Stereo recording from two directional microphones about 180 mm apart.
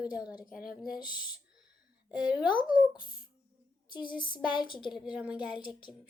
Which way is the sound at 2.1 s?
5° right (ahead or behind).